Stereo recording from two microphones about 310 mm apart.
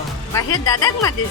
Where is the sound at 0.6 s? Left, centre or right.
Centre.